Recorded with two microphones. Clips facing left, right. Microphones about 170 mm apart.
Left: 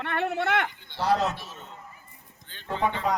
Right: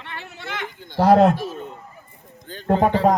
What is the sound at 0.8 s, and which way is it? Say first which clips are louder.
A man's voice: right 11 dB; 45° right (ahead or behind).